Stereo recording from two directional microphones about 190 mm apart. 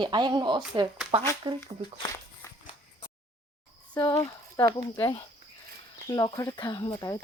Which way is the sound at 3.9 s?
15° left (ahead or behind).